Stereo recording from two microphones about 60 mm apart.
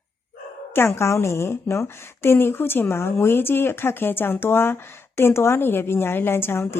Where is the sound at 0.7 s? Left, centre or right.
Left.